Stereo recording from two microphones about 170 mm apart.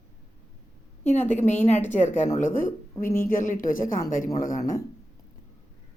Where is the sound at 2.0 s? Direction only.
45° left (ahead or behind).